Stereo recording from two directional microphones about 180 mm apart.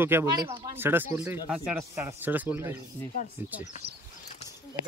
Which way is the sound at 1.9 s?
15° right (ahead or behind).